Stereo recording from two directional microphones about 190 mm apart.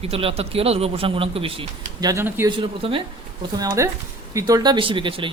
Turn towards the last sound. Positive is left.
turn(degrees=-25)  # may be behind; listen again after turning